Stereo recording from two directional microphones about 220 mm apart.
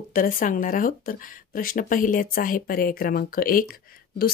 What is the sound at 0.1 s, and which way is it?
Speech, 40° left (ahead or behind).